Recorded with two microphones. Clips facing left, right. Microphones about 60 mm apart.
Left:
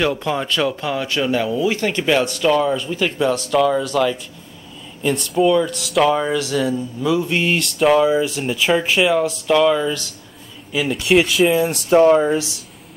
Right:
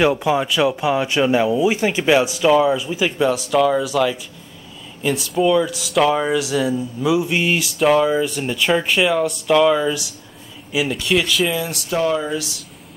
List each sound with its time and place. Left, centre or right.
0.0 s speech: centre
11.5 s speech: left